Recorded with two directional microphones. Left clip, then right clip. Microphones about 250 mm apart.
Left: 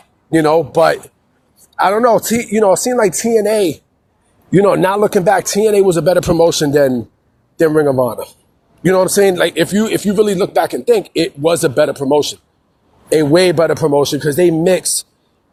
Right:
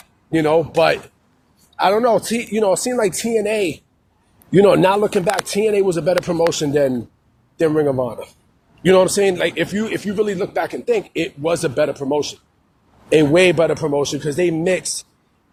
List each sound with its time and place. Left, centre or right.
0.3 s speech: left